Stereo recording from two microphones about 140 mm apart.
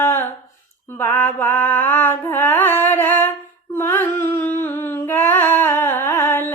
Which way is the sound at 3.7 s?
15° left (ahead or behind).